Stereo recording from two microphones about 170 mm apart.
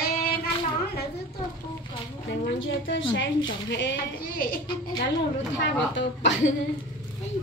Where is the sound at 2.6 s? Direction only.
90° left; by 4.5 s 60° left (ahead or behind).